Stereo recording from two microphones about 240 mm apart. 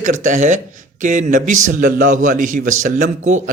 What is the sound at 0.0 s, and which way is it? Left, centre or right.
A man's voice, right.